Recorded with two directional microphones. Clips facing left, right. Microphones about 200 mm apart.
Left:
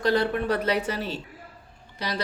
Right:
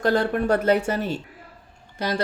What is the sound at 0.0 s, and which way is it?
Speech, 50° right (ahead or behind).